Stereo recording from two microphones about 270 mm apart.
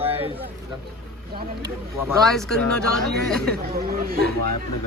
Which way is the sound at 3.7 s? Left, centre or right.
Right.